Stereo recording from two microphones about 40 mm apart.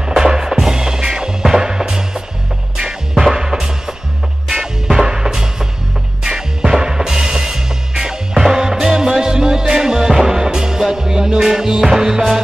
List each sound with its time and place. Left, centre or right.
0.0 s music: centre